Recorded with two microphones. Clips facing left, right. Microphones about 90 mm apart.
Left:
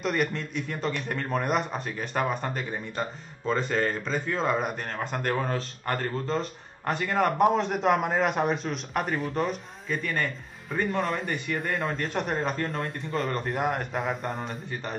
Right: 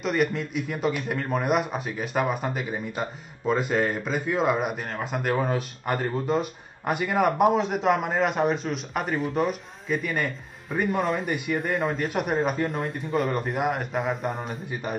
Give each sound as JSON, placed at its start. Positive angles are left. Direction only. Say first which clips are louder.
{"t": 0.0, "sound": "a man's voice", "louder": "right 3 dB", "side_deg": 0}